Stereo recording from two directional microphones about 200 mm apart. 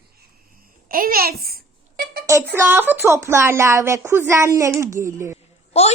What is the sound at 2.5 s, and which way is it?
Speech, 10° right (ahead or behind).